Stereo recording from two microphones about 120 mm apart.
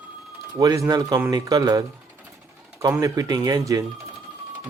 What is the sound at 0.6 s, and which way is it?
Speech, 25° right (ahead or behind).